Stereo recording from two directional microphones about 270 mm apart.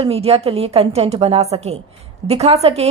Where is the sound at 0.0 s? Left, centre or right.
Right.